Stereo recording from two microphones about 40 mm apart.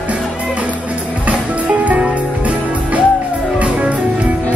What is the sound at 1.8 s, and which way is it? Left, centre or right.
Music, right.